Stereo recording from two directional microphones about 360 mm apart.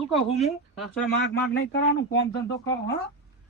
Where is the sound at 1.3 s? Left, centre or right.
Left.